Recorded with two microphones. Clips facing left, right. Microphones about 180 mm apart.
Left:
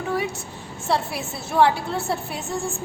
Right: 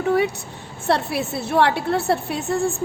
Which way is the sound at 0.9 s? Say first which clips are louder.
Right 4 dB; 65° right (ahead or behind).